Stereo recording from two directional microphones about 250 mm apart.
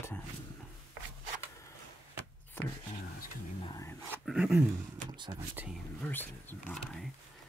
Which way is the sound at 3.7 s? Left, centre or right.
Centre.